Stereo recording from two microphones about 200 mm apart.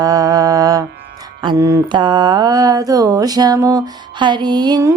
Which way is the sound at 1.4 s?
20° right (ahead or behind).